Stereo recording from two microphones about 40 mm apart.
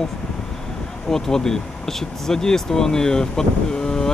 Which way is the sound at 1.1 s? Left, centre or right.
Centre.